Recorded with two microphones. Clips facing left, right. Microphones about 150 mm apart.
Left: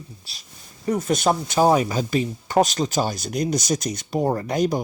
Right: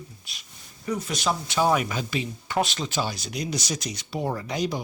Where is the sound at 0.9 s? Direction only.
50° left (ahead or behind).